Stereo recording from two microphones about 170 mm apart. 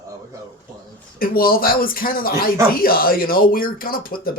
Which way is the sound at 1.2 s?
60° left (ahead or behind).